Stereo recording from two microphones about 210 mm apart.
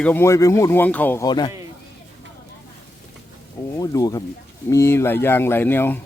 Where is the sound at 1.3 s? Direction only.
20° left (ahead or behind).